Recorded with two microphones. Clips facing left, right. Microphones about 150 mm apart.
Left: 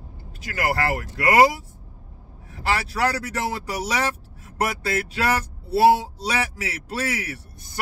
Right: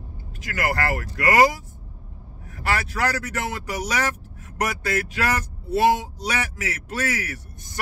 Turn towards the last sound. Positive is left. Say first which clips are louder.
# even
turn(degrees=30)  # may be behind; listen again after turning